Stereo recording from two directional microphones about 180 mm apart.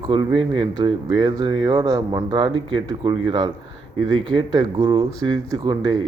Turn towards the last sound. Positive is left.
turn(degrees=-20)  # may be behind; listen again after turning